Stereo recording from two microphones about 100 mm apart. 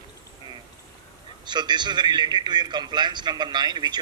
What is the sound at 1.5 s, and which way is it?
A man's voice, 45° right (ahead or behind).